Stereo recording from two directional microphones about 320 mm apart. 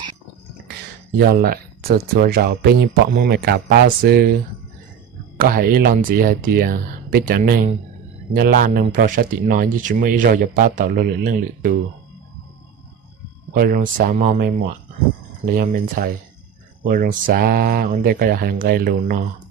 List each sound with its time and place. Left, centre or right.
1.3 s speech: right
5.4 s speech: right
13.5 s speech: right
15.5 s speech: right